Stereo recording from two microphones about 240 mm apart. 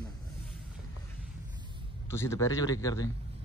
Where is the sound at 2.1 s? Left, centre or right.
Centre.